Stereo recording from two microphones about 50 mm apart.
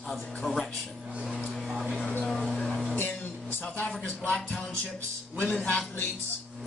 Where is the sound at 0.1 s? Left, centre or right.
Centre.